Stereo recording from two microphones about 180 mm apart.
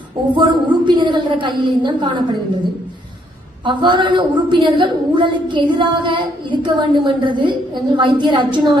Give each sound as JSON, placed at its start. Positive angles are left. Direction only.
{"t": 0.3, "sound": "a woman's voice", "side_deg": -25}
{"t": 3.6, "sound": "a woman's voice", "side_deg": -25}